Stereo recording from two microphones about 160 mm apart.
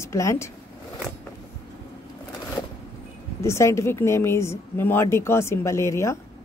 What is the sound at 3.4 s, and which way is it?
A woman's voice, 15° left (ahead or behind).